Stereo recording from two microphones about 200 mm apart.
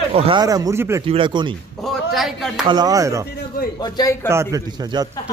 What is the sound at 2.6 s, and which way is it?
Speech, 20° right (ahead or behind).